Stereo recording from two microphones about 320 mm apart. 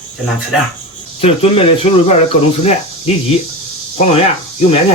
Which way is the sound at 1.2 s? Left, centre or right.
Centre.